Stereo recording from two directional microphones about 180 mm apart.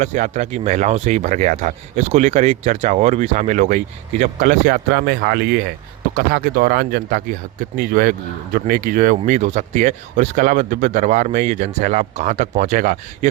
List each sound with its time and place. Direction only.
0.0 s speech: 40° right (ahead or behind)